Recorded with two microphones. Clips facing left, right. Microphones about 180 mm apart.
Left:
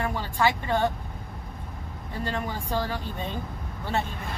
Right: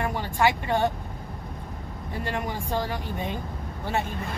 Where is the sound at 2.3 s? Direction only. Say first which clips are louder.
Right 1 dB; 15° right (ahead or behind).